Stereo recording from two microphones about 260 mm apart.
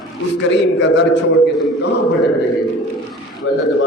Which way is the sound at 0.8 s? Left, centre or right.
Left.